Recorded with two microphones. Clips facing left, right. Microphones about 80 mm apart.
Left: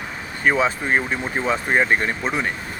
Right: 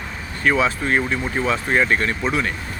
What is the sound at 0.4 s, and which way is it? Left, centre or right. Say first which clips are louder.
Speech: even; centre.